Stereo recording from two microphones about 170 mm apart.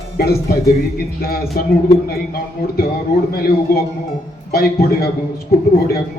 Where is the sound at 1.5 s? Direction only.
60° left (ahead or behind).